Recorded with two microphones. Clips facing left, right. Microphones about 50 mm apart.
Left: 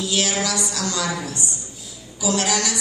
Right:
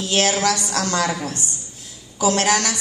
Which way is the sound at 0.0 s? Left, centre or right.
Right.